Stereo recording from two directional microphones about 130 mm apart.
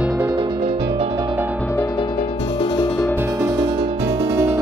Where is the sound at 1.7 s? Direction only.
25° left (ahead or behind).